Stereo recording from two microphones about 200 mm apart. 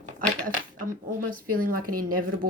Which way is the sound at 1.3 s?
45° right (ahead or behind).